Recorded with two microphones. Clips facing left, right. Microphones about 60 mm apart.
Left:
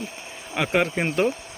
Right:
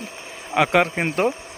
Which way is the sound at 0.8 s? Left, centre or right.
Right.